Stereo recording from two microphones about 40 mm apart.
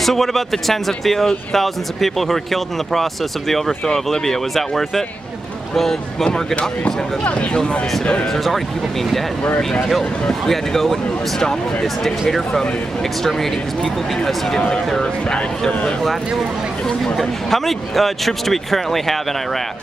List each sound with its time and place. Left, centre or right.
0.0 s speech: centre
6.8 s speech: left
7.5 s speech: left
8.3 s speech: centre
10.4 s speech: centre
16.3 s speech: centre